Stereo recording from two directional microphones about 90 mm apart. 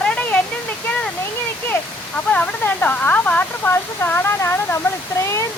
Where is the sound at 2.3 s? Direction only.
15° left (ahead or behind); by 5.4 s 35° left (ahead or behind).